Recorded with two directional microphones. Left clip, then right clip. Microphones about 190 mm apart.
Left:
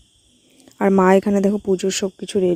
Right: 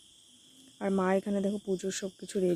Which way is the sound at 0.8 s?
50° left (ahead or behind).